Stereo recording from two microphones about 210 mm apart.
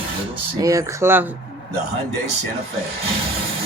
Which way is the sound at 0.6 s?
15° right (ahead or behind).